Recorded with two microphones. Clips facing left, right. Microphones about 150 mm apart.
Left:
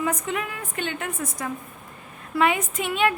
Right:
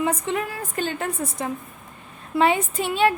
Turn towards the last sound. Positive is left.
turn(degrees=-30)  # may be behind; listen again after turning